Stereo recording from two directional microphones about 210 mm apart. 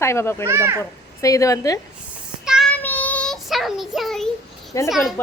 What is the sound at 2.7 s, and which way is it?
Child singing, 10° left (ahead or behind).